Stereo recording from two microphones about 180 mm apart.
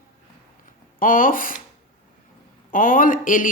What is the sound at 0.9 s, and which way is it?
Speech, 50° left (ahead or behind).